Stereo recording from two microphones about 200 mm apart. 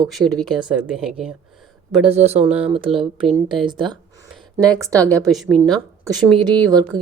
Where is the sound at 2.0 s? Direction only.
30° right (ahead or behind); by 5.2 s 15° right (ahead or behind).